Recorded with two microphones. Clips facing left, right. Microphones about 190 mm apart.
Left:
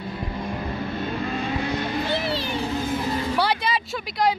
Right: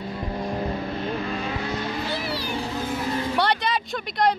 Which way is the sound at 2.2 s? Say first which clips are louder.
Left 3 dB; 25° left (ahead or behind).